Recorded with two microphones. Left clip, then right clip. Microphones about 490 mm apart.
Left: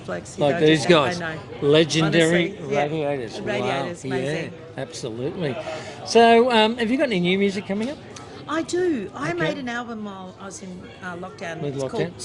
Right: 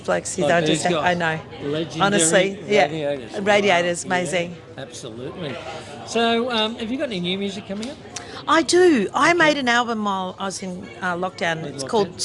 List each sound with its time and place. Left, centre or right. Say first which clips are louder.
0.1 s speech: right 4 dB; right
0.6 s speech: left 4 dB; left
1.0 s speech: right 5 dB; right
1.7 s speech: left 10 dB; left
2.3 s speech: right 5 dB; right
2.9 s speech: even; centre
3.4 s speech: right 10 dB; right
4.8 s speech: left 5 dB; left
8.4 s speech: right 8 dB; right